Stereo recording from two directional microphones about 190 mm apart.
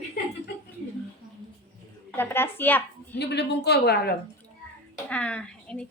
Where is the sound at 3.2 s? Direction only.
60° left (ahead or behind).